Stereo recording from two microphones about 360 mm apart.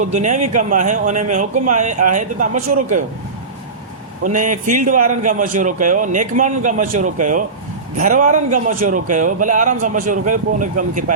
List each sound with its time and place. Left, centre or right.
0.0 s a man's voice: centre
4.2 s a man's voice: right